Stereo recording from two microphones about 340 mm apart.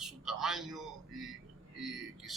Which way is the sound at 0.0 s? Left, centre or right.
Centre.